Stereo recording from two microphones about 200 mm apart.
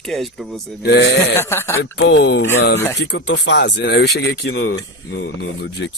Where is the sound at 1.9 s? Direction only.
60° left (ahead or behind).